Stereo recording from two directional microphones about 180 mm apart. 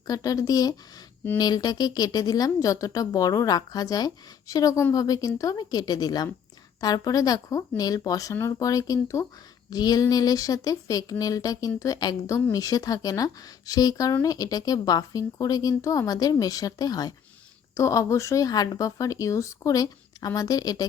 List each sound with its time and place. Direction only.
0.1 s speech: 20° left (ahead or behind)